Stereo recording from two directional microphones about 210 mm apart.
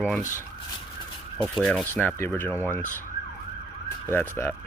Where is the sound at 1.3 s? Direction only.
Centre (ahead or behind).